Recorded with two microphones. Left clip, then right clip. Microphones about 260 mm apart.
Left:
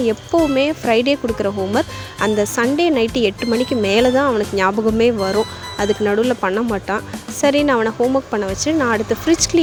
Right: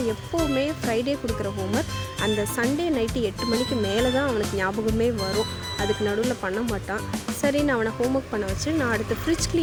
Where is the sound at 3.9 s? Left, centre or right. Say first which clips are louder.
Left 10 dB; left.